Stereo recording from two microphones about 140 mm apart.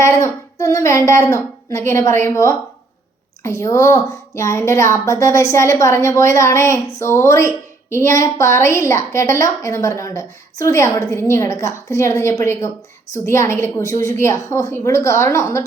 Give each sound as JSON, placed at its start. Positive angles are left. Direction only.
{"t": 0.0, "sound": "speech", "side_deg": 20}